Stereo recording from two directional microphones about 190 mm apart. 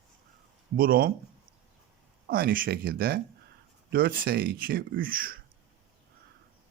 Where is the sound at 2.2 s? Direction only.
50° right (ahead or behind).